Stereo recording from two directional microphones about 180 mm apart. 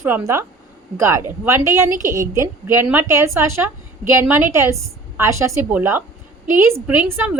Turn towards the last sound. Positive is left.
turn(degrees=-10)  # may be behind; listen again after turning